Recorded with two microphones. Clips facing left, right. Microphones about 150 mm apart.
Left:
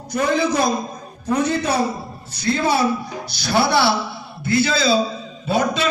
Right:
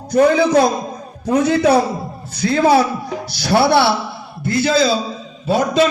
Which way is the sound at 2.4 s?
90° right.